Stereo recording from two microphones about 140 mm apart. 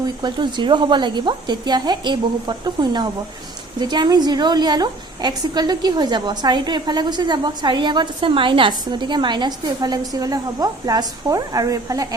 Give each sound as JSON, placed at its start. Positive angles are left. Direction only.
{"t": 0.0, "sound": "a woman's voice", "side_deg": -30}